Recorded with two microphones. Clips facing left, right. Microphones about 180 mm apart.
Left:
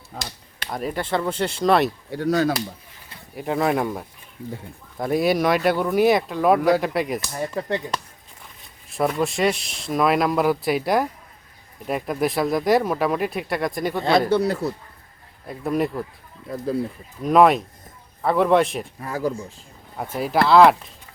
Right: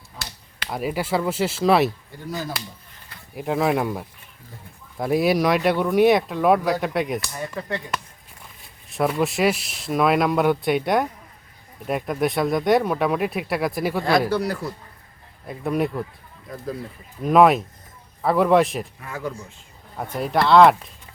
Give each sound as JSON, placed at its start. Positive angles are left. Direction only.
{"t": 0.7, "sound": "speech", "side_deg": -5}
{"t": 2.0, "sound": "speech", "side_deg": 75}
{"t": 3.3, "sound": "speech", "side_deg": 0}
{"t": 8.9, "sound": "speech", "side_deg": 0}
{"t": 14.3, "sound": "a man's voice", "side_deg": 25}
{"t": 15.4, "sound": "speech", "side_deg": 0}
{"t": 17.2, "sound": "speech", "side_deg": 0}
{"t": 19.0, "sound": "speech", "side_deg": 35}
{"t": 20.0, "sound": "speech", "side_deg": 0}